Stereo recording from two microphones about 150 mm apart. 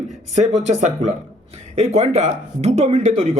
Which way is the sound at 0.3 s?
50° right (ahead or behind).